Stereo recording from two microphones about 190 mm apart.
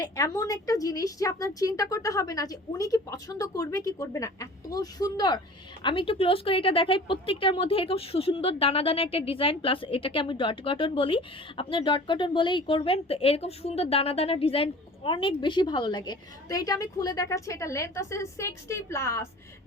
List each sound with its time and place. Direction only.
0.0 s speech: 20° left (ahead or behind)